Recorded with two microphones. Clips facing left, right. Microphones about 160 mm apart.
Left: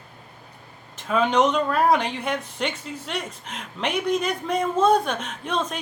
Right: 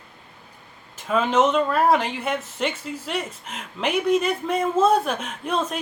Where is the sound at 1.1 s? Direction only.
5° right (ahead or behind).